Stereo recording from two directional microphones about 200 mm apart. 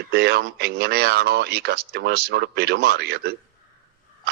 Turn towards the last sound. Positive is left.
turn(degrees=-55)  # may be behind; listen again after turning